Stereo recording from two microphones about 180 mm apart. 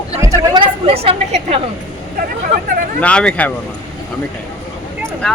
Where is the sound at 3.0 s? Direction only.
5° left (ahead or behind).